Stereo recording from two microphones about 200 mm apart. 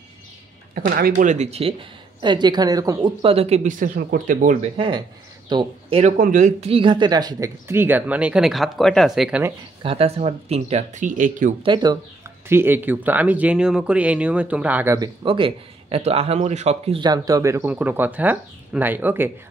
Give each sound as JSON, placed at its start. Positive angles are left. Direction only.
{"t": 0.7, "sound": "speech", "side_deg": -45}
{"t": 4.7, "sound": "speech", "side_deg": -25}
{"t": 6.1, "sound": "speech", "side_deg": -40}
{"t": 9.8, "sound": "speech", "side_deg": -30}
{"t": 11.6, "sound": "speech", "side_deg": -20}
{"t": 12.4, "sound": "speech", "side_deg": -10}
{"t": 15.0, "sound": "speech", "side_deg": -25}